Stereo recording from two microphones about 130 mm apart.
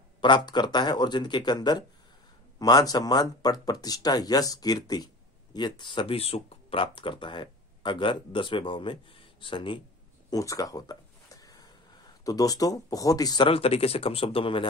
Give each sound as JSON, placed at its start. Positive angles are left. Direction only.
{"t": 0.2, "sound": "speech", "side_deg": 35}
{"t": 10.3, "sound": "a sound", "side_deg": 25}
{"t": 12.3, "sound": "speech", "side_deg": 25}
{"t": 13.5, "sound": "speech", "side_deg": 50}